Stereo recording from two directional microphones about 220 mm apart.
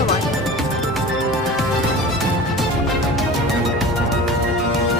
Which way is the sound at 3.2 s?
Centre (ahead or behind).